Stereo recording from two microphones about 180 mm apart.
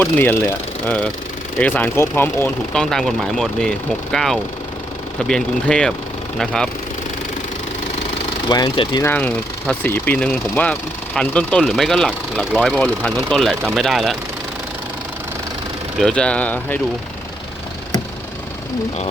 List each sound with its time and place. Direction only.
0.0 s speech: 10° left (ahead or behind)
8.4 s speech: 25° left (ahead or behind)
9.0 s speech: 10° left (ahead or behind)
16.0 s speech: 5° left (ahead or behind)